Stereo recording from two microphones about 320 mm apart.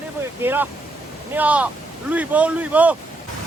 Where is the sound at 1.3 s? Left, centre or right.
Centre.